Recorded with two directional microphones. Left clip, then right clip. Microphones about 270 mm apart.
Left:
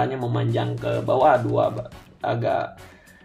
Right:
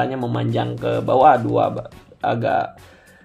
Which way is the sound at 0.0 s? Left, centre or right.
Right.